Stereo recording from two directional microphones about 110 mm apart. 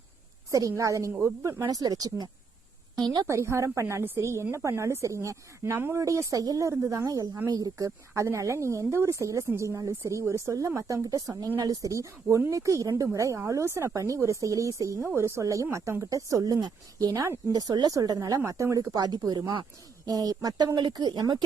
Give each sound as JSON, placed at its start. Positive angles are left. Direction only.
{"t": 0.5, "sound": "speech", "side_deg": -30}